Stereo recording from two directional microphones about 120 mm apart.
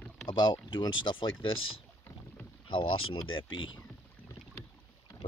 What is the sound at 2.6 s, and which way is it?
Speech, 50° left (ahead or behind).